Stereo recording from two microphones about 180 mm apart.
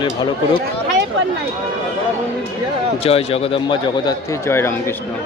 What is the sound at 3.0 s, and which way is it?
A man's voice, 35° left (ahead or behind).